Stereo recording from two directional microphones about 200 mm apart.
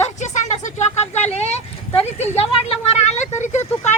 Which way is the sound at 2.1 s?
35° left (ahead or behind).